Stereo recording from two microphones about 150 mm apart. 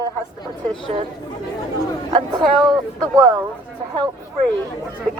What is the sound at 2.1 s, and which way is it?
Speech, 30° right (ahead or behind).